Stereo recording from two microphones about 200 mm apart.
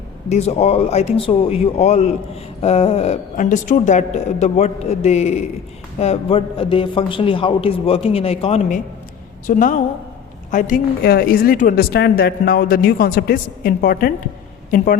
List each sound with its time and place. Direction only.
0.3 s a man's voice: 30° left (ahead or behind)
9.5 s a woman's voice: 40° left (ahead or behind)